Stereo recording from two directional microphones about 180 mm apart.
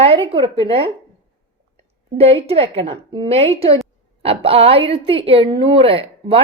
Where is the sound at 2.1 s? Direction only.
35° right (ahead or behind).